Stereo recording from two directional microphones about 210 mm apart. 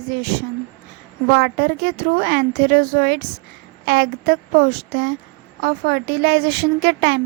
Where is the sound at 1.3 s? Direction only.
45° right (ahead or behind).